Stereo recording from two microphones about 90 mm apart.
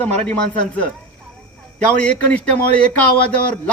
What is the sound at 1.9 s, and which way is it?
Speech, 15° left (ahead or behind).